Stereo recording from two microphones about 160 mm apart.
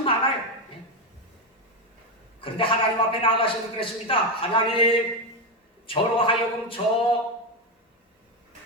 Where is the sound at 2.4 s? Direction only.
35° left (ahead or behind).